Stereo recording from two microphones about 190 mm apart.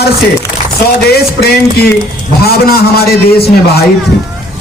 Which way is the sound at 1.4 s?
55° left (ahead or behind).